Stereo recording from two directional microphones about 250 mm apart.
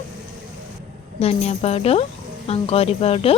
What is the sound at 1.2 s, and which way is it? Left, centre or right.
Speech, left.